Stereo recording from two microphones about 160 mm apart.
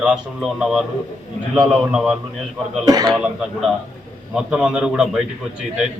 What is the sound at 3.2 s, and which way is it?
A man's voice, 5° right (ahead or behind).